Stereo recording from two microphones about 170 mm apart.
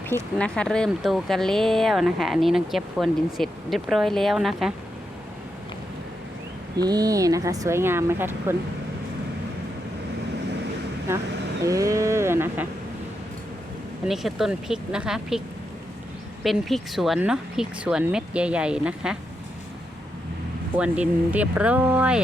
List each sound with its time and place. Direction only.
0.3 s speech: 5° left (ahead or behind)
6.7 s speech: 20° right (ahead or behind)
11.6 s speech: 20° right (ahead or behind)
14.1 s speech: centre (ahead or behind)
16.4 s speech: centre (ahead or behind)
20.7 s speech: 5° right (ahead or behind)